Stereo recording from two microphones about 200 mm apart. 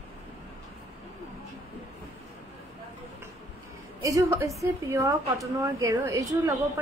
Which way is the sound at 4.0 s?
15° right (ahead or behind).